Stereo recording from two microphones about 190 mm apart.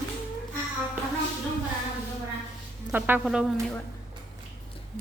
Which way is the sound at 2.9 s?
10° right (ahead or behind).